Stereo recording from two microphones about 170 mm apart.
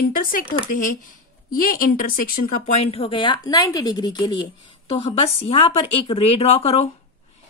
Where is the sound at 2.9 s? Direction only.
30° left (ahead or behind).